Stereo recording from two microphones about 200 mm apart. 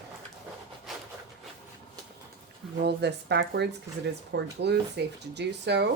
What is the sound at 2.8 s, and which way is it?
Speech, 55° right (ahead or behind).